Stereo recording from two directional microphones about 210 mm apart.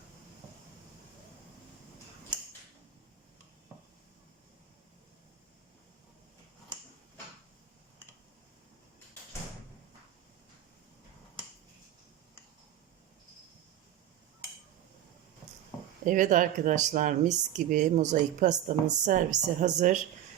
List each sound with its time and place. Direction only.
16.0 s speech: 40° right (ahead or behind)